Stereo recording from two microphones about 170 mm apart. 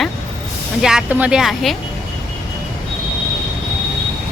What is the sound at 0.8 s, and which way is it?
Speech, 5° right (ahead or behind).